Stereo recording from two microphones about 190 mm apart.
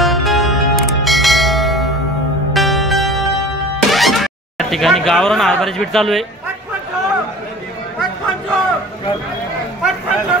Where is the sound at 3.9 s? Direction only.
Centre (ahead or behind).